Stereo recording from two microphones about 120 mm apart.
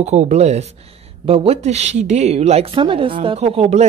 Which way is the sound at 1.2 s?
50° right (ahead or behind).